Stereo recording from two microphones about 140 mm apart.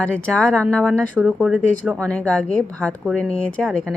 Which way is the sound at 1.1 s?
Centre (ahead or behind).